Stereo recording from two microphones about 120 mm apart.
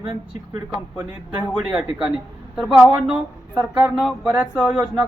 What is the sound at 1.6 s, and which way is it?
Speech, 5° right (ahead or behind).